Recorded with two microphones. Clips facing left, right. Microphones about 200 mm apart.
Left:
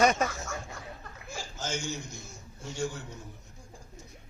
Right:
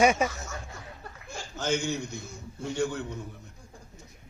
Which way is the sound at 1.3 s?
60° right (ahead or behind).